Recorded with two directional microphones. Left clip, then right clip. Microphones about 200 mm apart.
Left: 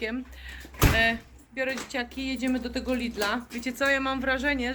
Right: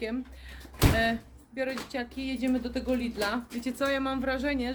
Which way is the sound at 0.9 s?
25° right (ahead or behind).